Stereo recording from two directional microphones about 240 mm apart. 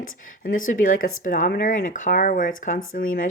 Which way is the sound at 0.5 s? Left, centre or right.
Left.